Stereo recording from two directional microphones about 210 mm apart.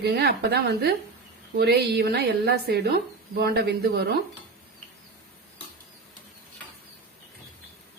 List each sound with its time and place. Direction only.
0.0 s a woman's voice: 50° right (ahead or behind)